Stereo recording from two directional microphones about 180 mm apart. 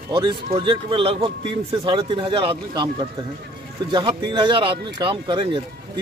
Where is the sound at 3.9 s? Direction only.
25° right (ahead or behind).